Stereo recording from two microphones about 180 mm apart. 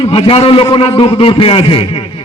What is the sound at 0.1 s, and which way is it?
A man's voice, 30° left (ahead or behind).